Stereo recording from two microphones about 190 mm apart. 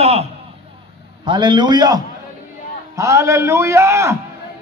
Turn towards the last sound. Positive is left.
turn(degrees=-15)  # may be behind; listen again after turning